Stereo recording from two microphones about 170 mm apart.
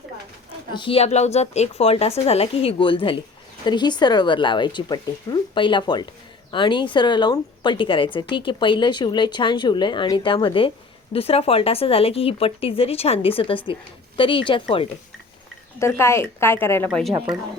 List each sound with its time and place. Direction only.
0.7 s a woman's voice: 30° left (ahead or behind)
15.8 s a woman's voice: 15° left (ahead or behind)
16.9 s speech: centre (ahead or behind)